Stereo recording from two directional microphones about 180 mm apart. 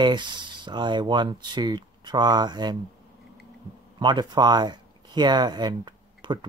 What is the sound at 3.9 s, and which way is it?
Speech, 25° right (ahead or behind).